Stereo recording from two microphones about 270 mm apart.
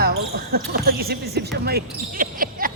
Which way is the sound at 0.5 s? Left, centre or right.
Right.